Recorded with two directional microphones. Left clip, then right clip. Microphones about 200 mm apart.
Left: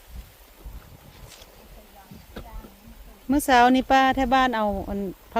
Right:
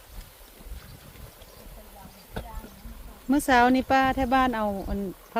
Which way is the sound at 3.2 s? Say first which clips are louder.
Left 3 dB; 15° left (ahead or behind).